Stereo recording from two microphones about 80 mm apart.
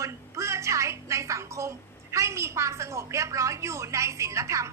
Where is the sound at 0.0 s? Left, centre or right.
Right.